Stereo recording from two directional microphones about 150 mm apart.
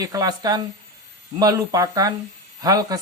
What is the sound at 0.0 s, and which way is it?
A man's voice, 25° right (ahead or behind).